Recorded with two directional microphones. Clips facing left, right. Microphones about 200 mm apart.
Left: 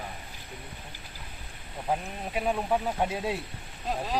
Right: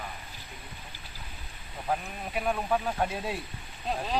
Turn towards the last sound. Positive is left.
turn(degrees=5)  # may be behind; listen again after turning